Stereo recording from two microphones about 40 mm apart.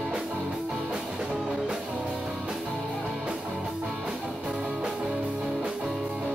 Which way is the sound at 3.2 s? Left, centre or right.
Right.